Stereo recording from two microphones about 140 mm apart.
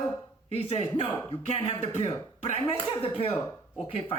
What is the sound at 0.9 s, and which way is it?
Speech, 40° left (ahead or behind).